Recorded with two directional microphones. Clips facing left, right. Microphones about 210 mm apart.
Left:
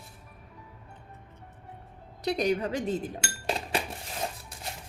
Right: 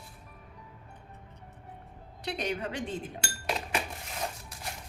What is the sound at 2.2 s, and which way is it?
Speech, 40° left (ahead or behind).